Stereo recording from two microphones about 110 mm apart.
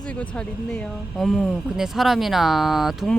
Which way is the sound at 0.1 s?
10° left (ahead or behind).